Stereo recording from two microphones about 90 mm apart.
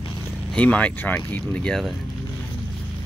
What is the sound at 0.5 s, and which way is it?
Speech, 15° left (ahead or behind).